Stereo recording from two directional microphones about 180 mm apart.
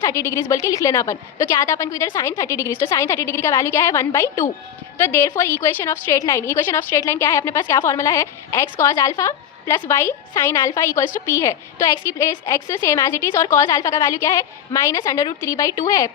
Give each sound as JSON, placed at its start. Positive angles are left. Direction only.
{"t": 0.0, "sound": "a woman's voice", "side_deg": 15}